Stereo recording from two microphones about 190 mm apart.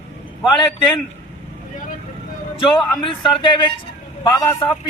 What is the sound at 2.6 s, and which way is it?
A man's voice, 25° left (ahead or behind).